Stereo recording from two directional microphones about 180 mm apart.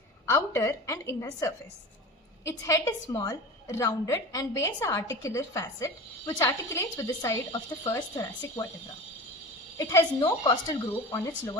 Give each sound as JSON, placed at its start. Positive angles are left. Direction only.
{"t": 0.3, "sound": "a woman's voice", "side_deg": 15}
{"t": 9.7, "sound": "speech", "side_deg": 15}